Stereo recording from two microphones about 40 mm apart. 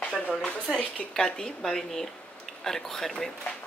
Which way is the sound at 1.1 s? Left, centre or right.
Centre.